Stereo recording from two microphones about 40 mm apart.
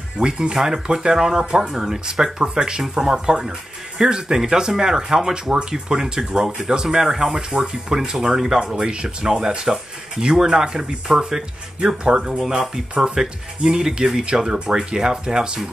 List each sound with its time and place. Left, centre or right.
0.2 s speech: centre